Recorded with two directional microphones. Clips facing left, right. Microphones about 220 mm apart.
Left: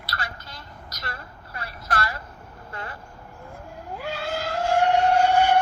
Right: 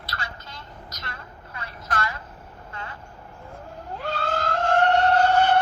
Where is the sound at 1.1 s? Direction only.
35° left (ahead or behind).